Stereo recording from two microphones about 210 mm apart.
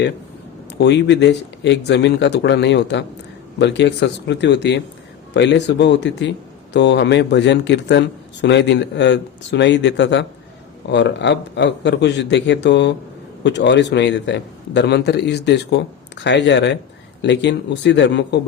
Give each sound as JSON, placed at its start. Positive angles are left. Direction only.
{"t": 0.8, "sound": "a man's voice", "side_deg": 55}